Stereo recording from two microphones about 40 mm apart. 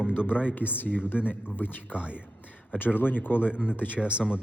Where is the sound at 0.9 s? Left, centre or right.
Left.